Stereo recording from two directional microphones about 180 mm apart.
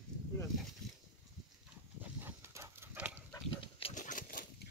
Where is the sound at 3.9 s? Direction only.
45° left (ahead or behind).